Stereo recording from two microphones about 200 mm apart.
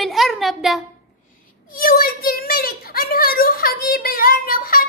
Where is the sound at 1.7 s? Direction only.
45° left (ahead or behind).